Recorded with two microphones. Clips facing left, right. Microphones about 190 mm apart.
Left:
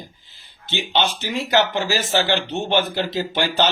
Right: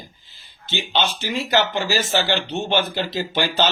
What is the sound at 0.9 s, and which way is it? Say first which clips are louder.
Speech: left 1 dB; 15° left (ahead or behind).